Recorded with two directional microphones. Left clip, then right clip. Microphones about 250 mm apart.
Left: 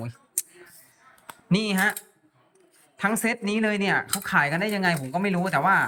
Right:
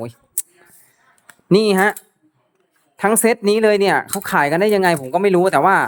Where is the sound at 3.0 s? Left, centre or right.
Right.